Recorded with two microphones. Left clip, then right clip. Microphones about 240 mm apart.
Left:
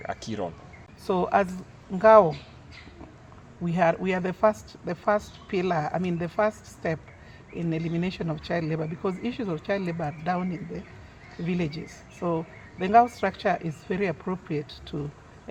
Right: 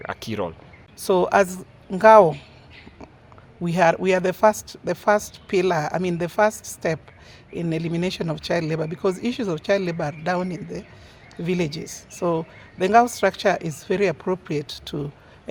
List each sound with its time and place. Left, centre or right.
0.0 s speech: right
3.6 s speech: right